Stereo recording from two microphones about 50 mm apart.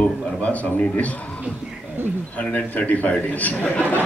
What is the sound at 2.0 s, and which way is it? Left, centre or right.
Speech, right.